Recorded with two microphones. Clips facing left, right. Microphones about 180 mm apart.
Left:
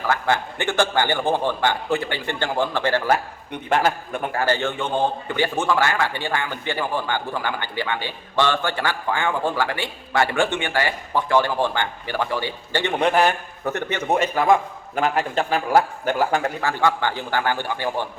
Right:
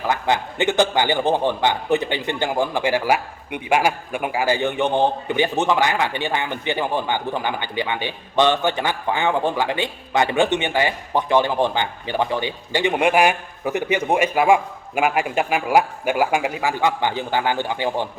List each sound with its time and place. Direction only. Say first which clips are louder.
0.1 s a man's voice: right 1 dB; 20° right (ahead or behind)